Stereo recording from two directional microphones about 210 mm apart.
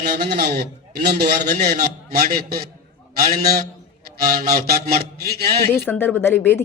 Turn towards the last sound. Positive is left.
turn(degrees=10)  # may be behind; listen again after turning